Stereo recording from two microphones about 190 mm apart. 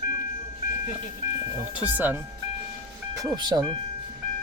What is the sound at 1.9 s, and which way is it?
Speech, 10° right (ahead or behind).